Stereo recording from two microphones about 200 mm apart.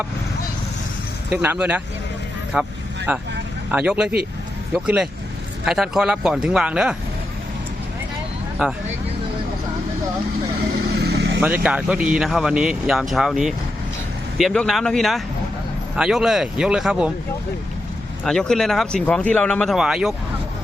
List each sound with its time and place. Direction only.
1.3 s speech: 5° right (ahead or behind)
8.6 s speech: 5° right (ahead or behind)
11.0 s vehicle: 55° right (ahead or behind)
11.3 s speech: 5° right (ahead or behind)
18.3 s speech: centre (ahead or behind)